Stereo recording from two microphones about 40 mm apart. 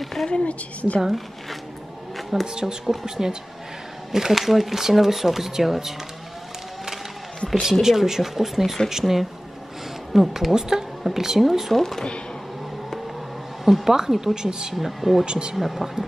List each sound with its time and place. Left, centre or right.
0.0 s a sound: centre
0.3 s a woman's voice: left
2.4 s speech: centre
7.8 s speech: centre
13.7 s speech: centre
15.2 s speech: right
15.5 s speech: centre